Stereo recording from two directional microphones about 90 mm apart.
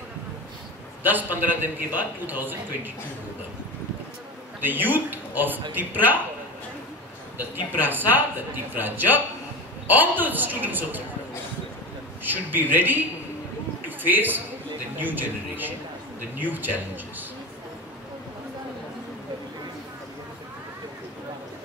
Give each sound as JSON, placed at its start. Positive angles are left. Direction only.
{"t": 1.0, "sound": "a man's voice", "side_deg": -20}
{"t": 4.6, "sound": "a man's voice", "side_deg": -20}
{"t": 7.3, "sound": "a man's voice", "side_deg": -20}
{"t": 12.2, "sound": "a man's voice", "side_deg": -20}